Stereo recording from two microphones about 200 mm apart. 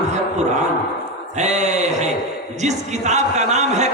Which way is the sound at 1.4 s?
35° right (ahead or behind).